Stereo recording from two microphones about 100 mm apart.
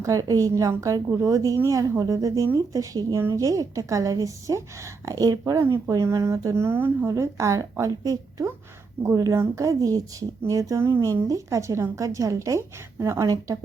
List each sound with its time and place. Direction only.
0.0 s speech: 35° right (ahead or behind)
5.6 s speech: 25° right (ahead or behind)
5.9 s speech: 35° right (ahead or behind)
7.1 s speech: 30° right (ahead or behind)